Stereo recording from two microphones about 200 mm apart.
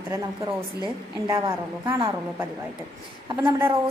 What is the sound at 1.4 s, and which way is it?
Speech, 25° right (ahead or behind).